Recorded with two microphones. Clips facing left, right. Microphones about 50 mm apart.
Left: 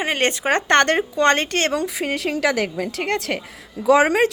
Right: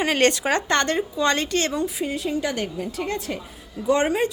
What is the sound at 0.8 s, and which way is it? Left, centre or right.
Speech, left.